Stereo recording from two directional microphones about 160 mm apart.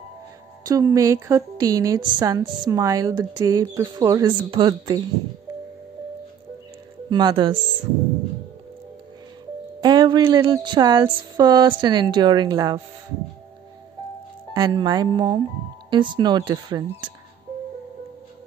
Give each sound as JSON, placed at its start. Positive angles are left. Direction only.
{"t": 0.7, "sound": "a woman's voice", "side_deg": -20}
{"t": 7.1, "sound": "a woman's voice", "side_deg": -25}
{"t": 9.8, "sound": "a woman's voice", "side_deg": -25}
{"t": 14.5, "sound": "a woman's voice", "side_deg": -25}